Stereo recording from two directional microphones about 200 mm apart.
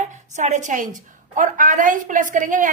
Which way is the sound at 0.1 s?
35° right (ahead or behind).